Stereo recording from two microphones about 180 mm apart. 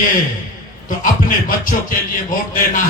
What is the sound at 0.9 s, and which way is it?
Speech, 45° left (ahead or behind).